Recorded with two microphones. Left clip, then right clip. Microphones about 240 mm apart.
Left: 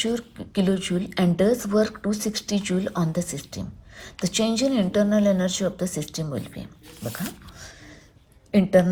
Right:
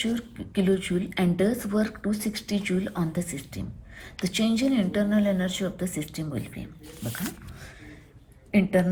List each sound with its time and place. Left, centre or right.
0.0 s a woman's voice: left
8.5 s a woman's voice: centre